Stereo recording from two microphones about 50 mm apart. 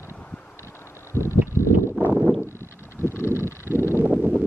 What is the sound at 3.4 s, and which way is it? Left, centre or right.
Vehicle, left.